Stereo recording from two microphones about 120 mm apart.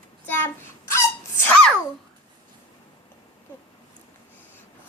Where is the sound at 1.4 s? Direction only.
10° left (ahead or behind).